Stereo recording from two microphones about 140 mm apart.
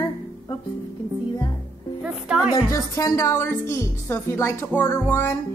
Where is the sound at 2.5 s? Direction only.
25° left (ahead or behind).